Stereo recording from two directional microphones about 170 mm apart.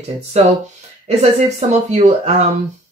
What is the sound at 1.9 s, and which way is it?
Speech, 40° right (ahead or behind).